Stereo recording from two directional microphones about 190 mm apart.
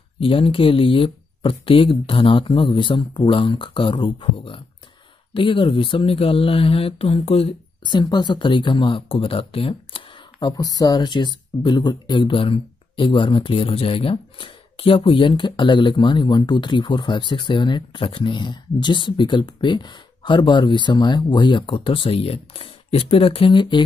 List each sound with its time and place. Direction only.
0.2 s speech: 30° left (ahead or behind)